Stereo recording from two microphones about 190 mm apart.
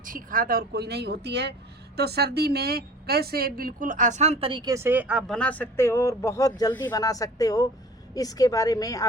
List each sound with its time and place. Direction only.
0.0 s a woman's voice: 45° right (ahead or behind); by 9.0 s 20° left (ahead or behind)